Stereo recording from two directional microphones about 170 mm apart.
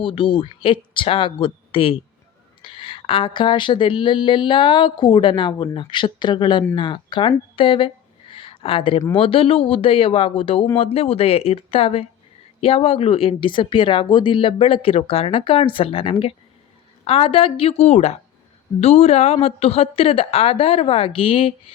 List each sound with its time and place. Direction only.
0.0 s speech: 30° left (ahead or behind)